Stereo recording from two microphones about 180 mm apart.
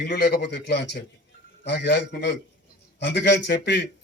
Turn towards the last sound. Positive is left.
turn(degrees=70)  # may be behind; listen again after turning